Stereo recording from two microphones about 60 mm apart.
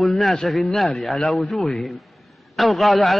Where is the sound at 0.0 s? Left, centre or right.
Centre.